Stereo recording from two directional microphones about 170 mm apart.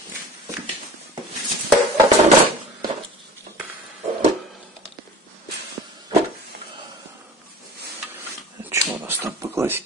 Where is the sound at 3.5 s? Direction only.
55° right (ahead or behind).